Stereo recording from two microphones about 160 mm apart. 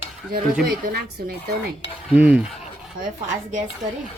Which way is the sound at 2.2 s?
5° right (ahead or behind).